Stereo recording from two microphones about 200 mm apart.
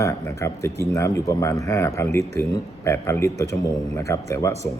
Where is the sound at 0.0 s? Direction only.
15° left (ahead or behind).